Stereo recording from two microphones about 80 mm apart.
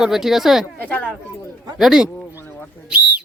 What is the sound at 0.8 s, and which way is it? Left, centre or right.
Speech, centre.